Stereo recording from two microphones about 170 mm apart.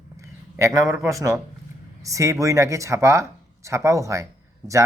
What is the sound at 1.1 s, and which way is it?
Speech, 20° right (ahead or behind).